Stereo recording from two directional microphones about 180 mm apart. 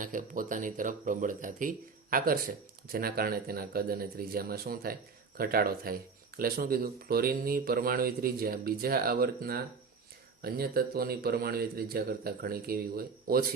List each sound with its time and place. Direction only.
0.0 s speech: 50° right (ahead or behind)